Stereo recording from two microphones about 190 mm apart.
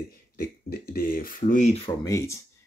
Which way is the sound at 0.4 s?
50° left (ahead or behind).